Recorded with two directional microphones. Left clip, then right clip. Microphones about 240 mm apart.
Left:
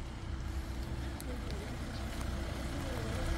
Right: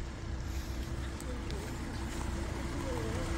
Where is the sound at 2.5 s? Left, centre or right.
Left.